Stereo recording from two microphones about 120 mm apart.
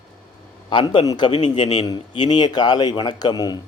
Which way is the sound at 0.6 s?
40° left (ahead or behind).